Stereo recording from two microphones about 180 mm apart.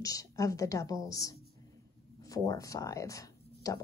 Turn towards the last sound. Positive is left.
turn(degrees=20)  # may be behind; listen again after turning